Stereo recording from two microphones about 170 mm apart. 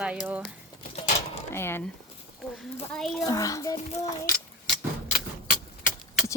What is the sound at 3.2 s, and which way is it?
Speech, 20° left (ahead or behind).